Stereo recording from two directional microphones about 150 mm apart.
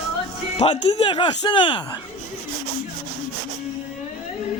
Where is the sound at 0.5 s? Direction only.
40° left (ahead or behind).